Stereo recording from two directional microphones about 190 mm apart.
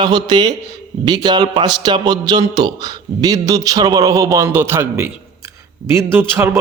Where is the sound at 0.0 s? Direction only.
20° right (ahead or behind).